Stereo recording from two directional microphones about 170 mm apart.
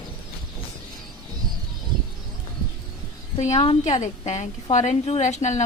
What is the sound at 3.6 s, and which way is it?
A woman's voice, 35° left (ahead or behind).